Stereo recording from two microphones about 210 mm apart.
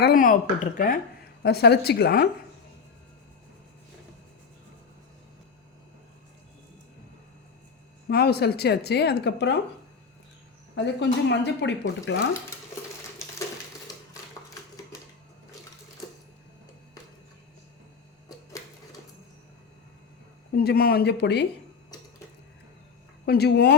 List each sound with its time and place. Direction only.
0.0 s speech: 40° left (ahead or behind)
1.4 s speech: 50° left (ahead or behind)
8.1 s speech: 50° left (ahead or behind)
10.8 s speech: 55° left (ahead or behind)
20.6 s speech: 45° left (ahead or behind)
23.2 s speech: 50° left (ahead or behind)